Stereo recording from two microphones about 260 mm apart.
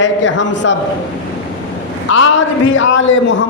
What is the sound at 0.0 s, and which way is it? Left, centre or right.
Speech, left.